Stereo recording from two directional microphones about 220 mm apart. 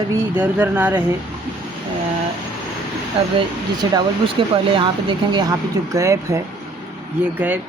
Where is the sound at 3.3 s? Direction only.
20° right (ahead or behind).